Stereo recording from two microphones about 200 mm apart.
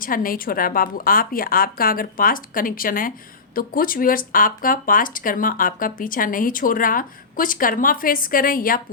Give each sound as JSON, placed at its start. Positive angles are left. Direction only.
{"t": 0.0, "sound": "speech", "side_deg": 45}